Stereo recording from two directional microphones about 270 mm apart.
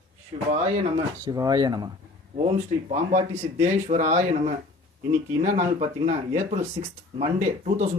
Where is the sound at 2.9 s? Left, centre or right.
Right.